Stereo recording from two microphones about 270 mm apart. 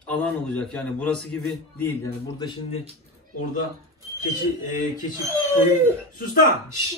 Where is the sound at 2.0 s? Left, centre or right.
Centre.